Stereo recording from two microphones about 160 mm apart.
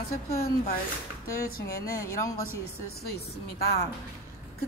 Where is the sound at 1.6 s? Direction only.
20° left (ahead or behind).